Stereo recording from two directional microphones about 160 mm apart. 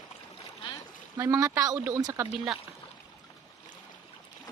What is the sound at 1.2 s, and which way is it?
Speech, 20° right (ahead or behind).